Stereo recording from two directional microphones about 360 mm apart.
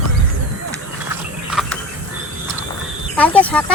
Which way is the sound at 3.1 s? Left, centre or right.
Centre.